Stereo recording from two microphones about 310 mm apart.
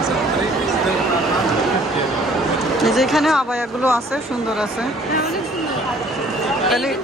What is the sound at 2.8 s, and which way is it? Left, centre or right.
Speech, centre.